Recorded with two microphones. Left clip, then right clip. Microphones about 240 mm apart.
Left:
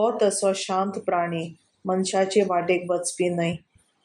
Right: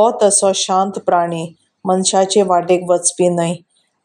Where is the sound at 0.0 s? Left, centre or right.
Right.